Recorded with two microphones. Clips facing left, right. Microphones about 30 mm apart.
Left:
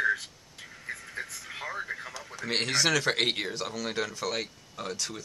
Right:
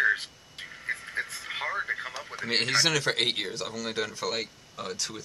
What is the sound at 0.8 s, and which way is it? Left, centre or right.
Radio, right.